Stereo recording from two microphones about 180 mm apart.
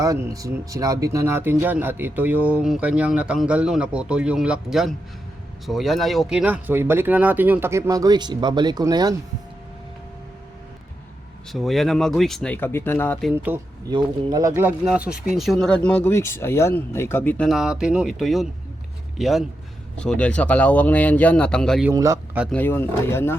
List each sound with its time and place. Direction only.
0.0 s speech: 20° right (ahead or behind)
11.5 s speech: centre (ahead or behind)
13.3 s speech: 10° right (ahead or behind)
13.9 s speech: 20° right (ahead or behind); by 21.8 s 5° left (ahead or behind)
21.8 s speech: 15° right (ahead or behind)
22.5 s speech: 10° left (ahead or behind)